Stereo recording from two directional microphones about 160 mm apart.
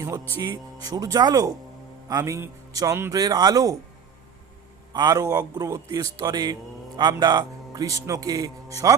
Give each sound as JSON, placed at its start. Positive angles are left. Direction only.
{"t": 0.0, "sound": "speech", "side_deg": -20}
{"t": 4.9, "sound": "speech", "side_deg": -25}